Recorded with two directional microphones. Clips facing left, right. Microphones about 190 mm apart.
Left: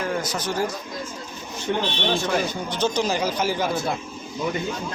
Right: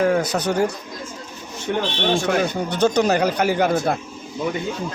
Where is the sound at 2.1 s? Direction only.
60° right (ahead or behind).